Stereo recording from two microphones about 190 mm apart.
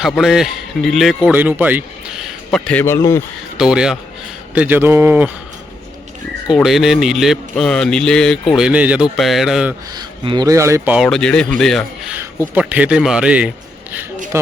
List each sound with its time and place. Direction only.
0.0 s a man's voice: centre (ahead or behind); by 3.2 s 15° left (ahead or behind)
3.6 s a man's voice: 5° right (ahead or behind)
6.5 s a man's voice: centre (ahead or behind)
9.9 s speech: 20° right (ahead or behind)
10.9 s a man's voice: centre (ahead or behind)